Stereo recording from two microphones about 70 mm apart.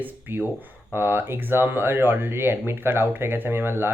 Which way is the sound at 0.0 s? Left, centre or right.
Right.